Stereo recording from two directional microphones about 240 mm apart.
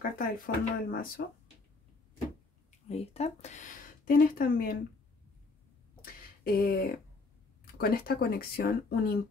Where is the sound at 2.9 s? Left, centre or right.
Left.